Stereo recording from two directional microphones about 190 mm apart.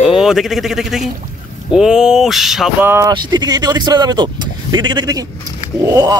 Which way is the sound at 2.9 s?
20° right (ahead or behind).